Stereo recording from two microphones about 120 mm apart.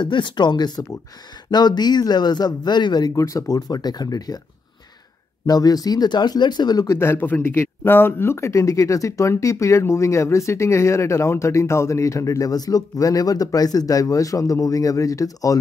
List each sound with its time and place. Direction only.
0.0 s speech: 40° left (ahead or behind)
5.5 s speech: 30° left (ahead or behind)
7.0 s speech: 15° left (ahead or behind)